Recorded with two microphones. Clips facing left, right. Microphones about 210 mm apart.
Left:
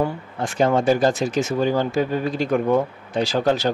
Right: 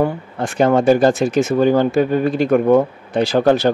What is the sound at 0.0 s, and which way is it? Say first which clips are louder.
Speech: right 5 dB; 60° right (ahead or behind).